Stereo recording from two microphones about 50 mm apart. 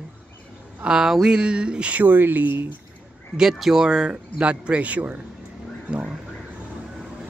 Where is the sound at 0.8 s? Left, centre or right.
Centre; by 2.1 s right.